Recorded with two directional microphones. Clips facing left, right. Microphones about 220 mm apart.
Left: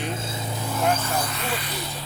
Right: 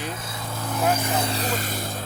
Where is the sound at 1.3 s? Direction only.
35° right (ahead or behind).